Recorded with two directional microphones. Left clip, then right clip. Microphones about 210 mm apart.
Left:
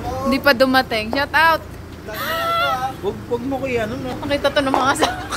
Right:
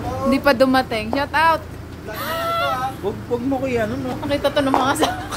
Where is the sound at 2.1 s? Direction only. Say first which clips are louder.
Left 2 dB; 10° right (ahead or behind).